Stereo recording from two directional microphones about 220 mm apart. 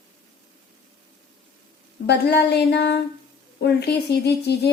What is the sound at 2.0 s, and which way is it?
Speech, 50° left (ahead or behind).